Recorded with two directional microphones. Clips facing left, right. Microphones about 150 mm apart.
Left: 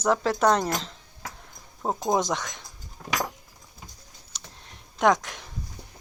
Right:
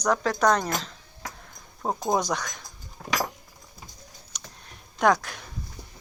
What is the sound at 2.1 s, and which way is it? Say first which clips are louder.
Speech: left 1 dB; 25° left (ahead or behind).